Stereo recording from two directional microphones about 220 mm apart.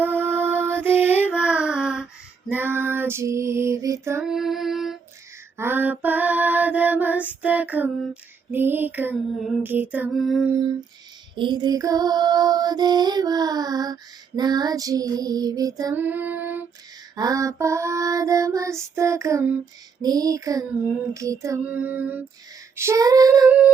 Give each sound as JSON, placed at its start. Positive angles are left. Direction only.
{"t": 0.0, "sound": "music", "side_deg": -10}
{"t": 11.3, "sound": "music", "side_deg": -20}